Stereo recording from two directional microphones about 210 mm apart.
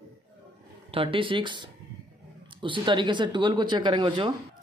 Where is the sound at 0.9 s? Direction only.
25° right (ahead or behind).